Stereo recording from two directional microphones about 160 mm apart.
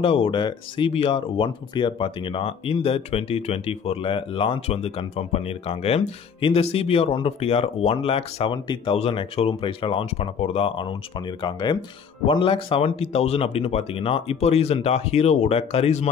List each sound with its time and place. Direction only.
0.0 s speech: 35° left (ahead or behind)